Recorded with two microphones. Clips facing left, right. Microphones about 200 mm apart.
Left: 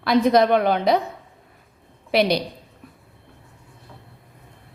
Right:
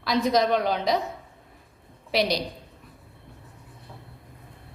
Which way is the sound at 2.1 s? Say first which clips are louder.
Left 5 dB; 60° left (ahead or behind).